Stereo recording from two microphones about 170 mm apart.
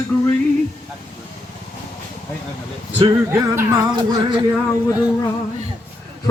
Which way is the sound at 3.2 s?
15° right (ahead or behind).